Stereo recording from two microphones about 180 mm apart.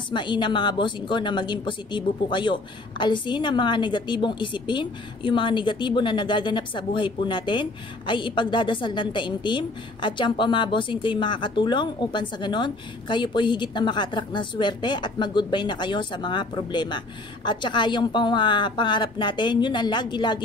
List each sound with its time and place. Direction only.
0.1 s a woman's voice: 25° left (ahead or behind)